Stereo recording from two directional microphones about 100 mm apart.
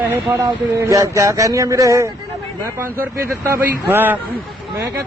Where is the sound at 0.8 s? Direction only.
35° right (ahead or behind).